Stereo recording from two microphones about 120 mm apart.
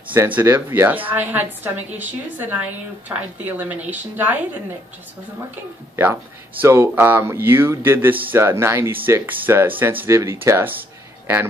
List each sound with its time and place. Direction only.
0.1 s a woman's voice: 15° right (ahead or behind)
6.6 s speech: 20° right (ahead or behind)